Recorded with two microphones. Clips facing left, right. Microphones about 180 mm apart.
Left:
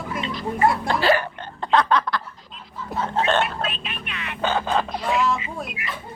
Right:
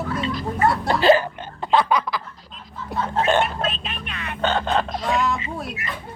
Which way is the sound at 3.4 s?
45° right (ahead or behind).